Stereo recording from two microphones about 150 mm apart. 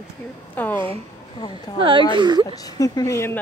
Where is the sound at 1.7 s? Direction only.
25° left (ahead or behind).